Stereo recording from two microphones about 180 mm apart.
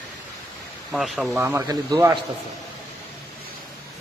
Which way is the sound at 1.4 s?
15° right (ahead or behind).